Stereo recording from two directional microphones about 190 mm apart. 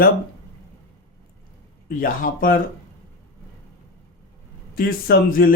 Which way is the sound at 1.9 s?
45° left (ahead or behind).